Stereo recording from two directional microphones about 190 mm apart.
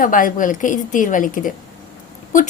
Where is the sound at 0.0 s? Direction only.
45° left (ahead or behind).